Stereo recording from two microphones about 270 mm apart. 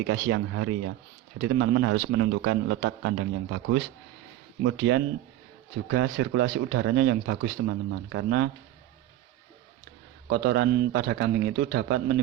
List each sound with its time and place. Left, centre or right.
0.1 s a man's voice: right
10.2 s a man's voice: right